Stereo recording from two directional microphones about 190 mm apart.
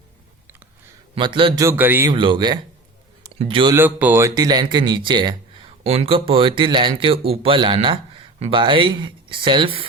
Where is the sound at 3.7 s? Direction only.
10° right (ahead or behind).